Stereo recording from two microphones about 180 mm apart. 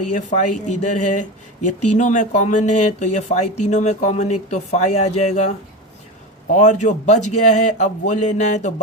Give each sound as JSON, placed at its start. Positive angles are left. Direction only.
{"t": 0.1, "sound": "speech", "side_deg": 40}
{"t": 6.5, "sound": "speech", "side_deg": 40}